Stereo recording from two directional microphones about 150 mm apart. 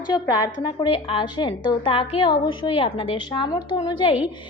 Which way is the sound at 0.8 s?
35° left (ahead or behind).